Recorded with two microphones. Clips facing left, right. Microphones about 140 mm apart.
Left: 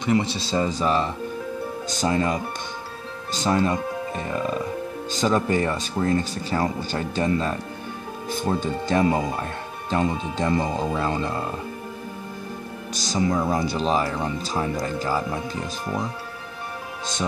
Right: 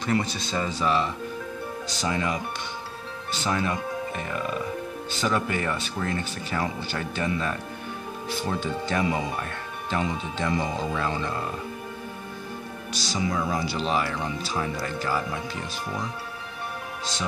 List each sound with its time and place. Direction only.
0.0 s speech: 20° left (ahead or behind); by 9.2 s 40° left (ahead or behind)
9.4 s music: 35° left (ahead or behind)
10.0 s speech: 40° left (ahead or behind)
12.9 s speech: 45° left (ahead or behind)
13.3 s speech: 30° left (ahead or behind)
13.6 s speech: 45° left (ahead or behind)